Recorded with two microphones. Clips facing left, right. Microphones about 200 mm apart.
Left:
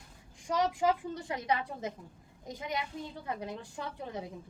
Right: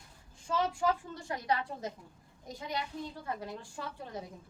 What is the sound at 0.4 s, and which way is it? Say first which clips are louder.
A woman's voice: left 2 dB; 15° left (ahead or behind).